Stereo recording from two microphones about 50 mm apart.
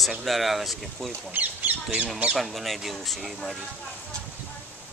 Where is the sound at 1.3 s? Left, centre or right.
Right.